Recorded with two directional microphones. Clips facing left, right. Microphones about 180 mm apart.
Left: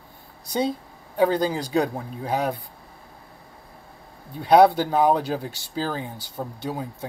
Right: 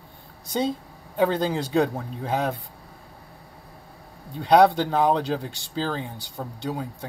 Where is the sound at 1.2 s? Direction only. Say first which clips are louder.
Left 1 dB; 10° left (ahead or behind).